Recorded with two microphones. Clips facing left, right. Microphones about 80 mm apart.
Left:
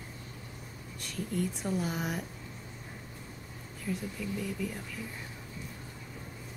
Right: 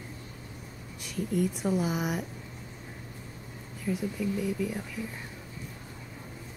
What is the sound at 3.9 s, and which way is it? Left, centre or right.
Speech, centre.